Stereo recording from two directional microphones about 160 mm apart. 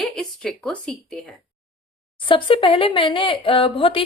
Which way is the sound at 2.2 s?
30° left (ahead or behind).